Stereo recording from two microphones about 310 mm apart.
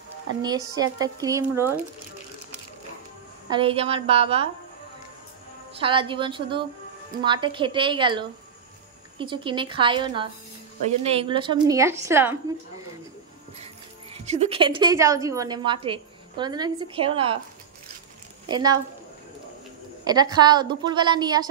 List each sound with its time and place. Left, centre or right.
1.0 s a woman's voice: centre
3.4 s a woman's voice: centre
5.8 s a woman's voice: centre
14.1 s a woman's voice: right
18.5 s a woman's voice: centre
20.1 s a woman's voice: centre